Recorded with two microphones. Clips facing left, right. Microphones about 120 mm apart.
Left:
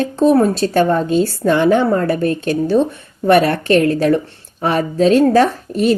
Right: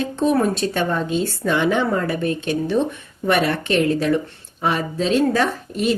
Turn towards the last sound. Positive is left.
turn(degrees=40)  # may be behind; listen again after turning